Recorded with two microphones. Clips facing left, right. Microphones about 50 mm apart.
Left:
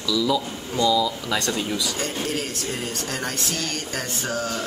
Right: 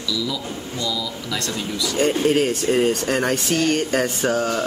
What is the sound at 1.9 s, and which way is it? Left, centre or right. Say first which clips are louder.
Speech: right 9 dB; right.